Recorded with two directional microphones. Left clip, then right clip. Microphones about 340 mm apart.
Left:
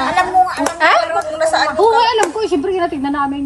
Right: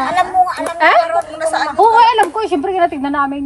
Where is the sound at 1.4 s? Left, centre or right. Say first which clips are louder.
Left 5 dB; centre.